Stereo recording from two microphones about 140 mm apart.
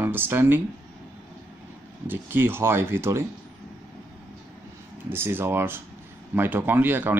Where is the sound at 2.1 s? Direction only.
15° right (ahead or behind).